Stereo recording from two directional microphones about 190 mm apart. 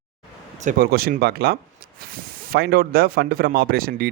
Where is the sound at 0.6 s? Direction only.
45° right (ahead or behind).